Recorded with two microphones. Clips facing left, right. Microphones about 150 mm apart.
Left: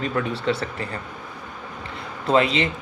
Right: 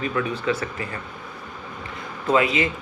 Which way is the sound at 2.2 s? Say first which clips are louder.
Left 1 dB; 30° left (ahead or behind).